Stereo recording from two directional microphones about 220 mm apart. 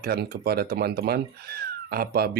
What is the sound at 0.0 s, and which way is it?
Speech, 45° right (ahead or behind).